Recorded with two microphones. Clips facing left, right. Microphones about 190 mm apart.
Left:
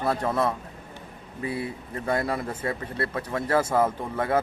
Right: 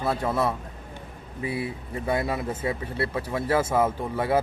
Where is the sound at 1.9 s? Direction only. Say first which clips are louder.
Even; 5° right (ahead or behind).